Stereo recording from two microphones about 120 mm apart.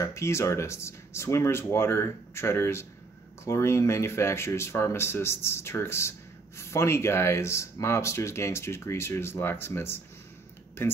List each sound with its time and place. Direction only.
0.0 s a man's voice: 25° left (ahead or behind)